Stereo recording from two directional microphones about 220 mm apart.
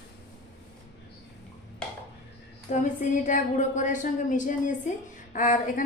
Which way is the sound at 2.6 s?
35° left (ahead or behind).